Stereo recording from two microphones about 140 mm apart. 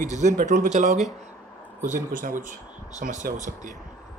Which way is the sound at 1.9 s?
70° right (ahead or behind).